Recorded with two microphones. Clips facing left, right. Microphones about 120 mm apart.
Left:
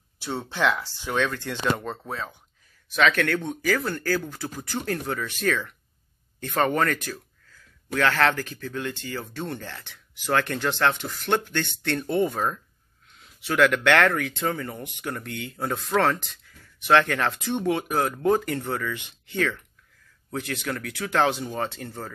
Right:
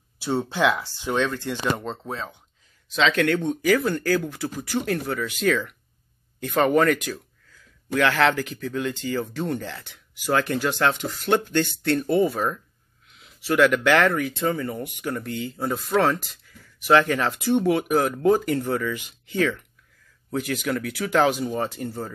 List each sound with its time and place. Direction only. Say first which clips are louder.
0.2 s speech: right 4 dB; 15° right (ahead or behind)